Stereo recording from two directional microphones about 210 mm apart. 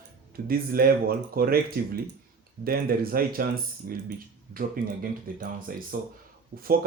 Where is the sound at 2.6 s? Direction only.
45° right (ahead or behind).